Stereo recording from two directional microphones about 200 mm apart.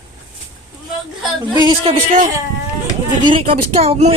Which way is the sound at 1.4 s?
20° right (ahead or behind).